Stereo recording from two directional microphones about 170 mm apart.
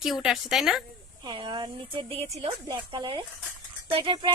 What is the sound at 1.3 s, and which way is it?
A woman's voice, 25° right (ahead or behind).